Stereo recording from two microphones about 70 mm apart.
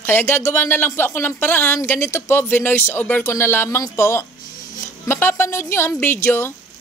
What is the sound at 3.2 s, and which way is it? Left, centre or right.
Speech, left.